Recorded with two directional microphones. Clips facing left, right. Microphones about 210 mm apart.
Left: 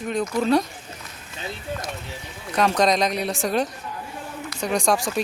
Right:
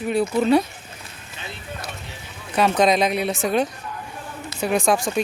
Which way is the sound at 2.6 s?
5° right (ahead or behind).